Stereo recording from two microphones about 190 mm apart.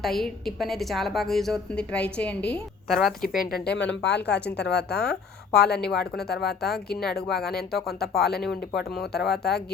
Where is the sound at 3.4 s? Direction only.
55° left (ahead or behind).